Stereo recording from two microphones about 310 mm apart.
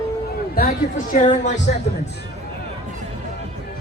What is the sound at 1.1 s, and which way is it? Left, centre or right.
Speech, left.